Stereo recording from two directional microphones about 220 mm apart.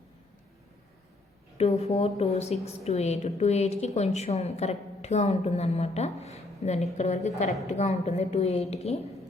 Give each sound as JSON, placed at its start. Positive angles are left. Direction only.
{"t": 1.5, "sound": "a woman's voice", "side_deg": 30}